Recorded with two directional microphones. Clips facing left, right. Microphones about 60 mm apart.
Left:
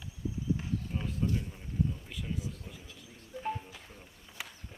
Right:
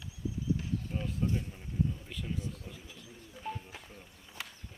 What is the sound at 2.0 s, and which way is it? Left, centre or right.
Speech, centre.